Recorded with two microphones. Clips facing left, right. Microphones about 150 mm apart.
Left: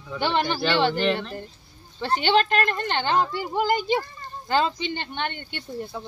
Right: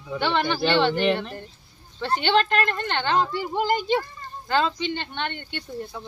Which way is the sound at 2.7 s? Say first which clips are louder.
Even; 15° left (ahead or behind).